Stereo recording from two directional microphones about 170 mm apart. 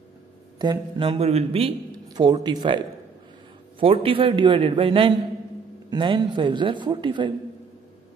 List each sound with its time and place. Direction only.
0.6 s a man's voice: 25° right (ahead or behind)
2.0 s speech: 25° right (ahead or behind)
3.8 s a man's voice: 35° right (ahead or behind)